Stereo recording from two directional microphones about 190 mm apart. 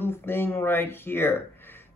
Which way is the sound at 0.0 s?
10° left (ahead or behind).